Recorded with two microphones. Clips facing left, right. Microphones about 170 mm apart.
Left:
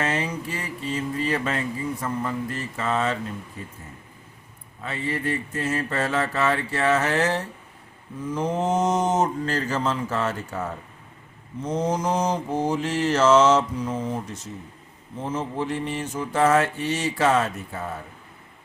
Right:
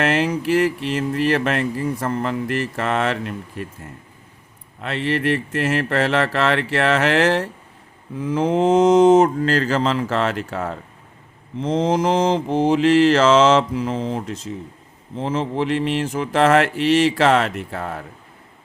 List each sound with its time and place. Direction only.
0.0 s speech: 90° right
4.8 s speech: 85° right
8.2 s mantra: 90° right